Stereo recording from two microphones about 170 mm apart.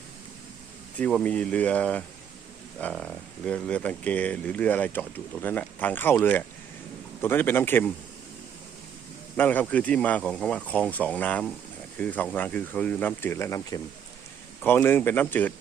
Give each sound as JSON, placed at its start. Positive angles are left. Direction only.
{"t": 0.9, "sound": "speech", "side_deg": 10}
{"t": 9.3, "sound": "speech", "side_deg": 10}